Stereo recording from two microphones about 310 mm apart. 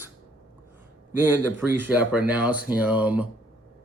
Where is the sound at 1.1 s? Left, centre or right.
Centre.